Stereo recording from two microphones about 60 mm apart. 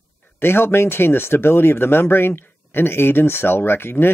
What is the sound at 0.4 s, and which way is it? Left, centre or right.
Speech, left.